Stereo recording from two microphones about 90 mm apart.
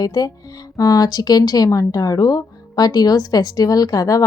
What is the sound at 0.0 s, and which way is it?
A woman's voice, 45° left (ahead or behind).